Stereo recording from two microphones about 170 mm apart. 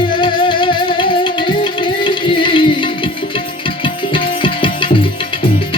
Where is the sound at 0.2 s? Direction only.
30° left (ahead or behind).